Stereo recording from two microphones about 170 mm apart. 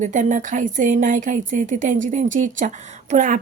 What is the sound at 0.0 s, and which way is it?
Speech, 50° right (ahead or behind).